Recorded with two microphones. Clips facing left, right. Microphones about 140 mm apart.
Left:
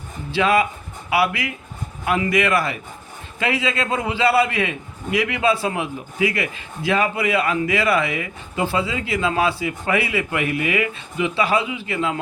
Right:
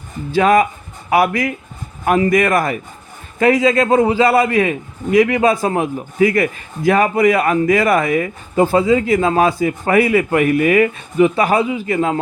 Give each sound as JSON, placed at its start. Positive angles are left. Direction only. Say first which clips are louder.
{"t": 0.3, "sound": "a man's voice", "louder": "right 6 dB", "side_deg": -45}